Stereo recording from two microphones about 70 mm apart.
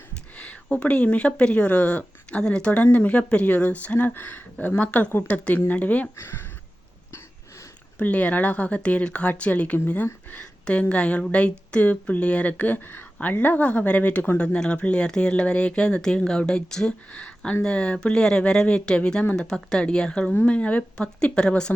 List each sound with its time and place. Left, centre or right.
0.3 s speech: centre
6.1 s speech: left
7.9 s speech: centre